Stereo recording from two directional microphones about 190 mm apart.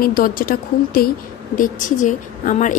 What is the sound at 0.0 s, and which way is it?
A woman's voice, 50° left (ahead or behind).